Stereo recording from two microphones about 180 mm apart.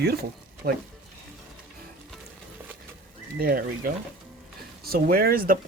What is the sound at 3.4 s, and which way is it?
Speech, 55° right (ahead or behind).